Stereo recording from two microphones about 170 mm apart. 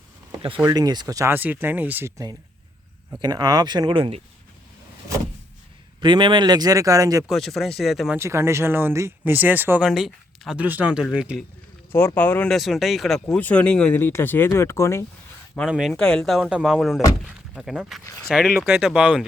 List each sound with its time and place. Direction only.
0.6 s speech: 20° right (ahead or behind)
6.0 s speech: 30° right (ahead or behind)
7.3 s speech: centre (ahead or behind)
8.2 s speech: 15° right (ahead or behind)
11.9 s speech: 15° left (ahead or behind)
15.7 s speech: centre (ahead or behind)